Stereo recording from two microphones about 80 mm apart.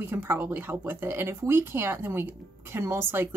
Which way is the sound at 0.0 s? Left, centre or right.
Right.